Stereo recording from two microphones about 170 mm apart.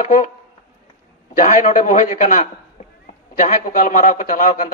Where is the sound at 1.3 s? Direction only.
50° left (ahead or behind).